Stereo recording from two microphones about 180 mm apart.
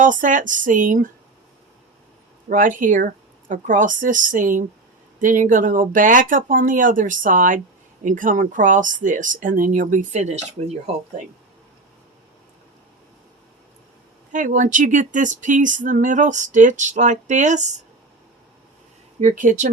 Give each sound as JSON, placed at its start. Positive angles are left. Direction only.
{"t": 0.0, "sound": "speech", "side_deg": -45}
{"t": 2.5, "sound": "speech", "side_deg": -45}
{"t": 14.3, "sound": "speech", "side_deg": -45}
{"t": 19.2, "sound": "speech", "side_deg": -45}